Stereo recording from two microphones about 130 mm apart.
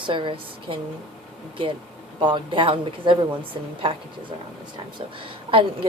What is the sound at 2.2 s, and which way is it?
Speech, 35° right (ahead or behind).